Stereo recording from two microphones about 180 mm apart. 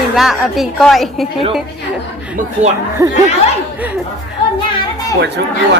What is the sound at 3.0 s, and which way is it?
Speech, 20° right (ahead or behind).